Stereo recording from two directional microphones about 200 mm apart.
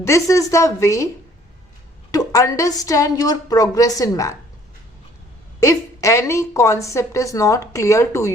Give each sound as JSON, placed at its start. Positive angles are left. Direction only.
{"t": 0.0, "sound": "a woman's voice", "side_deg": 15}
{"t": 2.1, "sound": "a woman's voice", "side_deg": 15}
{"t": 5.5, "sound": "a woman's voice", "side_deg": 15}